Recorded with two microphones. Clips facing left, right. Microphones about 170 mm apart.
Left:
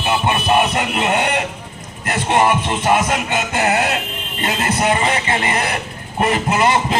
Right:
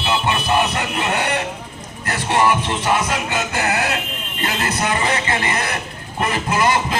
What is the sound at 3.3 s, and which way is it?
Music, 25° left (ahead or behind).